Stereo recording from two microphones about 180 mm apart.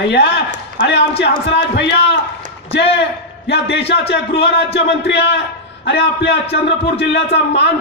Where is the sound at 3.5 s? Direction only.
70° left (ahead or behind).